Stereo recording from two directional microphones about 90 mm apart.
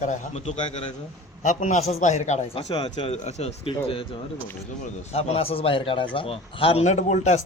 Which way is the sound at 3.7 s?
90° left.